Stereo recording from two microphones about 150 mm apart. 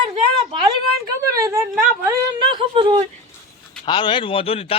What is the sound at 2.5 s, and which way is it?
Speech, 35° right (ahead or behind).